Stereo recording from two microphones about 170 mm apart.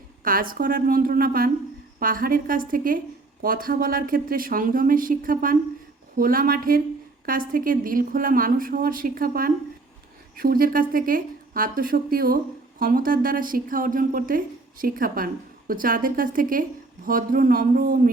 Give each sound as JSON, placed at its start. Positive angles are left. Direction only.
{"t": 0.3, "sound": "a woman's voice", "side_deg": -55}